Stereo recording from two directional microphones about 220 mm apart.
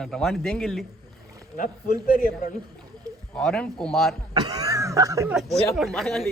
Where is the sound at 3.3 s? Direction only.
5° left (ahead or behind).